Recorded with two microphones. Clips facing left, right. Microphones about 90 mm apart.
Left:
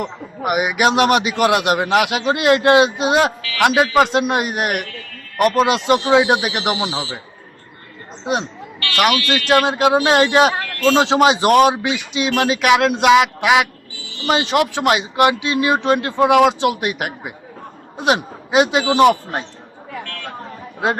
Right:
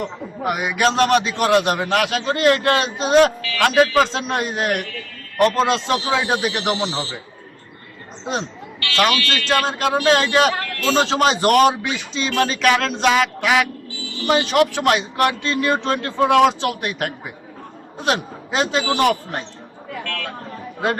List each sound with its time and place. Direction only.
0.4 s speech: 10° left (ahead or behind)
8.2 s speech: 10° left (ahead or behind)